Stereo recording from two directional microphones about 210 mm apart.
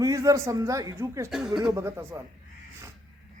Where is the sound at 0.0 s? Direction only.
15° right (ahead or behind).